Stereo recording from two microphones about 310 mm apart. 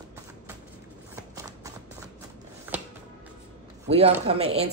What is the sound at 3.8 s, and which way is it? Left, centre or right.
Speech, centre.